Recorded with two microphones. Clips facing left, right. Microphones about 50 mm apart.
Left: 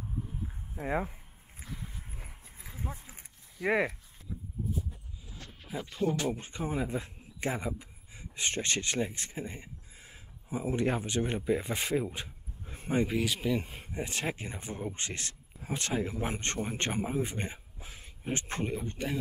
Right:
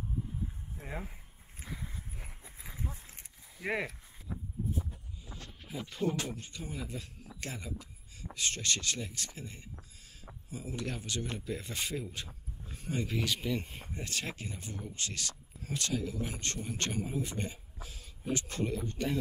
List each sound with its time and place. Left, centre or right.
0.7 s speech: left
2.1 s dog: centre
3.6 s speech: centre
4.6 s a sound: centre
5.7 s speech: left
12.6 s a sound: left
13.1 s speech: centre
13.9 s speech: centre